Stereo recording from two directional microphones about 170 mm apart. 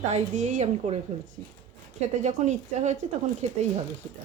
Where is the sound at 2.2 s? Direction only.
45° right (ahead or behind).